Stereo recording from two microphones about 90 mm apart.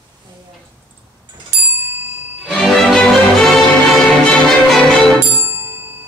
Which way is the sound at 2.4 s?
Centre (ahead or behind).